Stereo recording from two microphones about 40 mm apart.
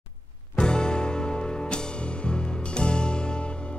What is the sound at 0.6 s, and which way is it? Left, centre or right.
Music, left.